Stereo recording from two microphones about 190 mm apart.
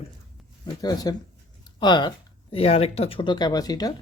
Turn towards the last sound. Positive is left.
turn(degrees=20)  # may be behind; listen again after turning